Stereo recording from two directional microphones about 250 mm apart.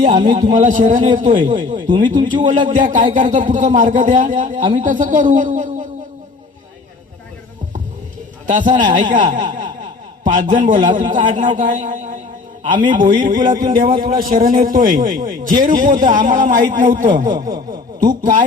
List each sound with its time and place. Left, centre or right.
0.2 s speech: right
1.5 s speech: centre
2.5 s a man's voice: right
8.4 s a man's voice: right
17.3 s speech: centre